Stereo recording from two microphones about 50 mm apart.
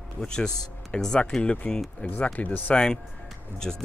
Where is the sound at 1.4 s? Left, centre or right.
Left.